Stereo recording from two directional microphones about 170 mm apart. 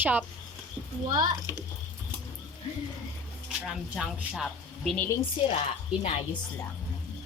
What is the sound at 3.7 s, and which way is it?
Speech, centre (ahead or behind).